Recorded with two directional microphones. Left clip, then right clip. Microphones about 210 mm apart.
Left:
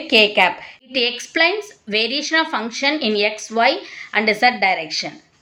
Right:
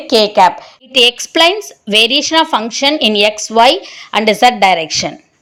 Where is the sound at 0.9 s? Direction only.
45° right (ahead or behind).